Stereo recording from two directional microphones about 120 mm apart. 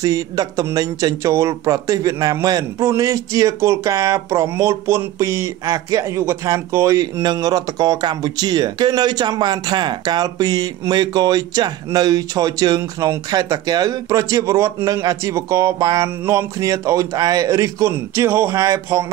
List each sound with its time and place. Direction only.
0.0 s a man's voice: 30° right (ahead or behind)